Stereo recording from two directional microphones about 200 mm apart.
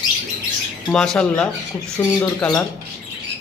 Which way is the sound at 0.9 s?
5° left (ahead or behind).